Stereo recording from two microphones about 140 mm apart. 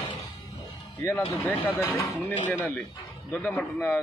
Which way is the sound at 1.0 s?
15° left (ahead or behind).